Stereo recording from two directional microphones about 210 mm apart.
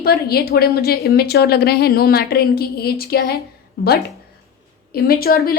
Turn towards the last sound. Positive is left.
turn(degrees=45)  # may be behind; listen again after turning